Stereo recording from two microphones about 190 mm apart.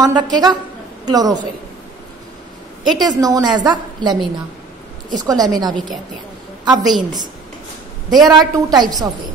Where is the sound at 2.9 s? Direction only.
20° right (ahead or behind).